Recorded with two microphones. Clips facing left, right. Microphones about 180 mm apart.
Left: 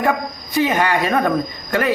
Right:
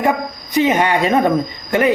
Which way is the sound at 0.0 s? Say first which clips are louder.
Right 2 dB; 20° right (ahead or behind).